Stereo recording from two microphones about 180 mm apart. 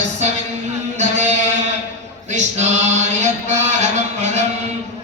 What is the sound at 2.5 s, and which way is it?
Chant, 40° right (ahead or behind).